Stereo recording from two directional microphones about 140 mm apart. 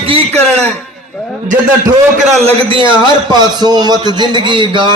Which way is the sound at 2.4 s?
40° right (ahead or behind).